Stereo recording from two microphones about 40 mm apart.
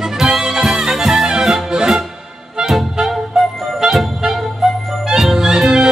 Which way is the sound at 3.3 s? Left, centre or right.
Centre.